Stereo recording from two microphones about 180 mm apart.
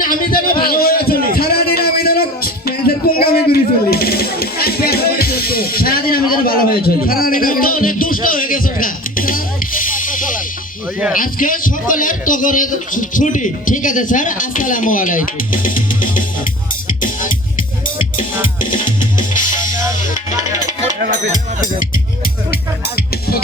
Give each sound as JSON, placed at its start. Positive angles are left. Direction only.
{"t": 0.0, "sound": "a sound", "side_deg": 50}
{"t": 3.5, "sound": "music", "side_deg": 60}
{"t": 11.1, "sound": "a man's voice", "side_deg": 50}
{"t": 18.6, "sound": "music", "side_deg": 45}